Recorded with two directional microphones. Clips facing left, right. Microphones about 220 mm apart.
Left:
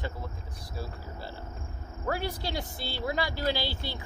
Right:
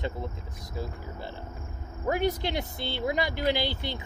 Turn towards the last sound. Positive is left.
turn(degrees=-20)  # may be behind; listen again after turning